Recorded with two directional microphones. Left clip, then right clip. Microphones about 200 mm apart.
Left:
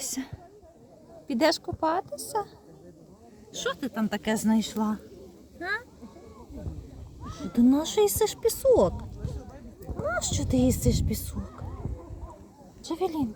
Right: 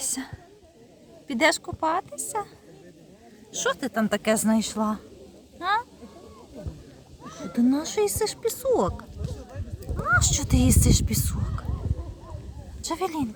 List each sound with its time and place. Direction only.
0.0 s whispering: 20° right (ahead or behind)
1.3 s speech: 25° right (ahead or behind)
3.5 s speech: 35° right (ahead or behind); by 4.9 s 15° right (ahead or behind)
5.5 s a sound: 10° right (ahead or behind)
7.3 s speech: 5° left (ahead or behind)
10.1 s speech: 20° right (ahead or behind)
12.8 s speech: 30° right (ahead or behind)